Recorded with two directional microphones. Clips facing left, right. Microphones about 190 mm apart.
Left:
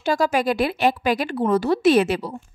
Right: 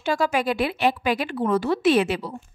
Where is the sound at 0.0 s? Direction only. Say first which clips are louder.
Left 2 dB; 40° left (ahead or behind).